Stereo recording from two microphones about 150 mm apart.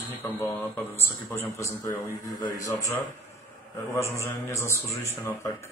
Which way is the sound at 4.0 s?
20° left (ahead or behind).